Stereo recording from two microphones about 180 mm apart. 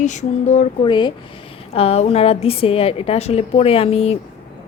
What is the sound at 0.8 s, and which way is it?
Speech, 25° left (ahead or behind).